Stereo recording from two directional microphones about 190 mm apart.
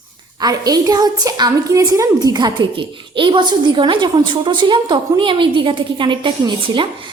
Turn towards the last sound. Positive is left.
turn(degrees=-25)  # may be behind; listen again after turning